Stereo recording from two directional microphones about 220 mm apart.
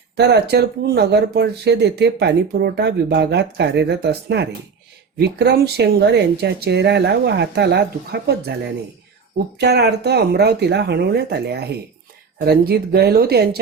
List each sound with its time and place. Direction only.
0.2 s speech: 50° right (ahead or behind)